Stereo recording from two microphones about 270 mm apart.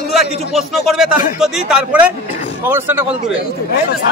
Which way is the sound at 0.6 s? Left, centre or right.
Centre.